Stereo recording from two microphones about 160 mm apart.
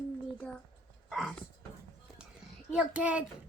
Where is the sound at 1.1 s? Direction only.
Centre (ahead or behind).